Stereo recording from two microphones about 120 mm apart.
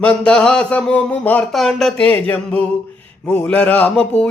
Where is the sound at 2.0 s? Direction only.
15° left (ahead or behind).